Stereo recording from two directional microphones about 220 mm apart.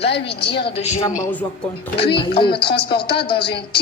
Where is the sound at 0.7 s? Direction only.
25° left (ahead or behind).